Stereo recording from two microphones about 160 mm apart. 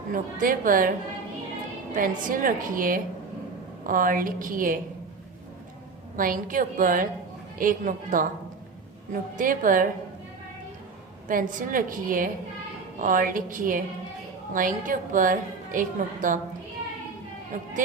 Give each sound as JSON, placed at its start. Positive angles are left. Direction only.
{"t": 0.1, "sound": "a woman's voice", "side_deg": -60}
{"t": 2.0, "sound": "a woman's voice", "side_deg": -60}
{"t": 6.1, "sound": "a woman's voice", "side_deg": -60}
{"t": 9.4, "sound": "a woman's voice", "side_deg": -60}
{"t": 11.3, "sound": "a woman's voice", "side_deg": -60}